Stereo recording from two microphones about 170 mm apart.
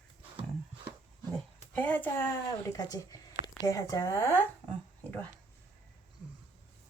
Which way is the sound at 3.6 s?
20° left (ahead or behind).